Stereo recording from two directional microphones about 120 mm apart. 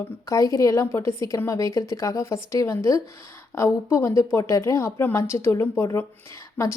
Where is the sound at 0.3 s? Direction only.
25° left (ahead or behind).